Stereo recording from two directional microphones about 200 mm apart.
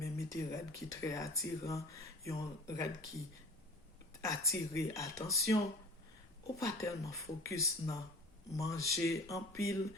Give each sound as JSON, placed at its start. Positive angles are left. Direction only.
{"t": 0.0, "sound": "speech", "side_deg": 15}
{"t": 4.2, "sound": "speech", "side_deg": 15}
{"t": 6.6, "sound": "speech", "side_deg": 15}